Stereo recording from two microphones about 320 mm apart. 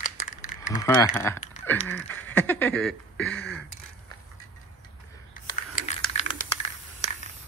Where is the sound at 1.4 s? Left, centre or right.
Left.